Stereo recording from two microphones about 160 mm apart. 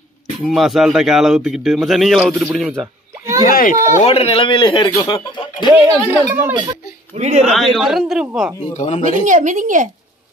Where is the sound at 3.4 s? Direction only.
60° left (ahead or behind).